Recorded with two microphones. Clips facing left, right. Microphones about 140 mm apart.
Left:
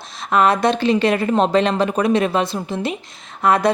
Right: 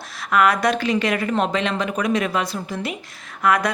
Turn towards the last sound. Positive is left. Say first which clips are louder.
# left 3 dB
turn(degrees=30)  # may be behind; listen again after turning